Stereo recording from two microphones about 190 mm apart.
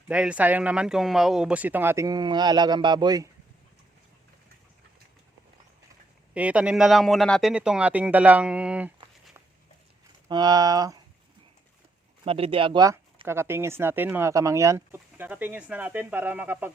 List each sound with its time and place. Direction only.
0.1 s speech: 5° right (ahead or behind); by 3.2 s 20° right (ahead or behind)
6.3 s speech: 5° right (ahead or behind)
10.2 s speech: 20° right (ahead or behind)
12.2 s speech: 30° right (ahead or behind); by 16.7 s 10° right (ahead or behind)